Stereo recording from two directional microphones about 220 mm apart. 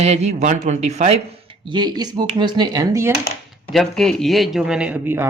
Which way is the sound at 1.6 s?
20° right (ahead or behind).